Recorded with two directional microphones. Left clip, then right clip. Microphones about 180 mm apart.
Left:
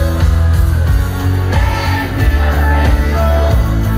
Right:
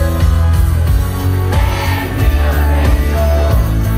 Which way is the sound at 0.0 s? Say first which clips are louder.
Even; 10° right (ahead or behind).